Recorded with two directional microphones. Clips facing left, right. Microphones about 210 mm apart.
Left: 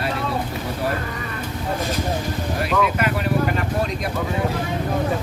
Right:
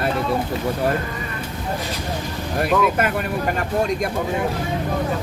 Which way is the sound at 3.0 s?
50° right (ahead or behind).